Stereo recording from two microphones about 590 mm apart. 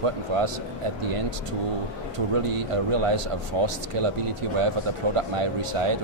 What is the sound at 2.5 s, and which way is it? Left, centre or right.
Speech, right.